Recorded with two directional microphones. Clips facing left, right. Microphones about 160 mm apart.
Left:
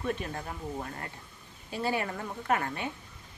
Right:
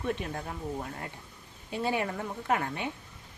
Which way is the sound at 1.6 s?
20° right (ahead or behind).